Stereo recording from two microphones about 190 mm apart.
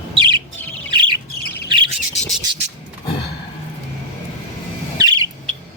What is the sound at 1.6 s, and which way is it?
Bird, 25° right (ahead or behind).